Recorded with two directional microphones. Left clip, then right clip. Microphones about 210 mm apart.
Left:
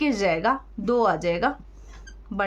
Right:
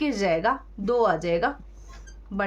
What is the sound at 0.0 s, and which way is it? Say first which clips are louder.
Speech: left 1 dB; 20° left (ahead or behind).